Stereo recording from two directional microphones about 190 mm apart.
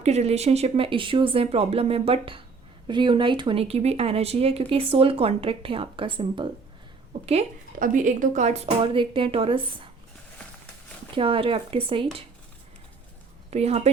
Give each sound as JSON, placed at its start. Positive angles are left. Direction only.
{"t": 0.0, "sound": "a woman's voice", "side_deg": -35}
{"t": 11.1, "sound": "speech", "side_deg": -30}
{"t": 13.5, "sound": "a woman's voice", "side_deg": -35}